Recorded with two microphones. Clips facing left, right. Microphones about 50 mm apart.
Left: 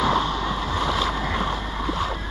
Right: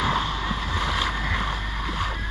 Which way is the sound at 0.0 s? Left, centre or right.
Centre.